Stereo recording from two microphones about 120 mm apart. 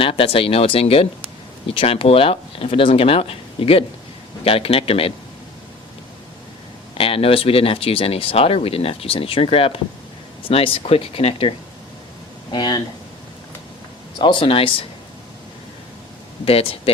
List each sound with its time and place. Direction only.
0.0 s speech: 50° left (ahead or behind)
6.9 s speech: 50° left (ahead or behind)
12.5 s speech: 35° left (ahead or behind)
14.2 s speech: 40° left (ahead or behind)
16.5 s speech: 55° left (ahead or behind)